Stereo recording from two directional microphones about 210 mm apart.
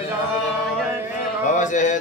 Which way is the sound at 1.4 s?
35° left (ahead or behind).